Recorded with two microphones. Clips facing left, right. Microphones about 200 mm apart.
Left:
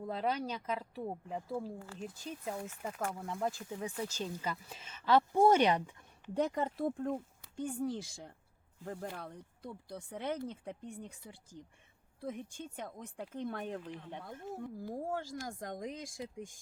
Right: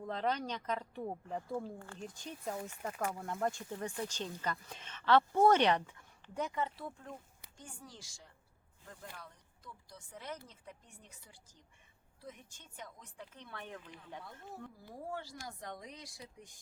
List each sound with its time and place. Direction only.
0.0 s speech: 10° left (ahead or behind)
6.3 s speech: 40° left (ahead or behind)
14.8 s speech: 45° left (ahead or behind)